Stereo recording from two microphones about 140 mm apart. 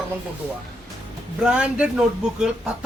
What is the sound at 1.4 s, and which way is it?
Speech, 5° right (ahead or behind).